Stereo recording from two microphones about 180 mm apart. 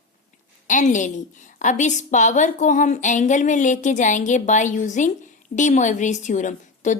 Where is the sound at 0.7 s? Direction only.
45° left (ahead or behind).